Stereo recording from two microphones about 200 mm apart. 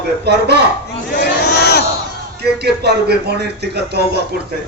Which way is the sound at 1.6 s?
55° left (ahead or behind).